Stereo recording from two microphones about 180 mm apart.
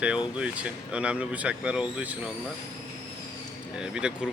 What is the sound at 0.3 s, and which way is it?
Speech, 5° right (ahead or behind).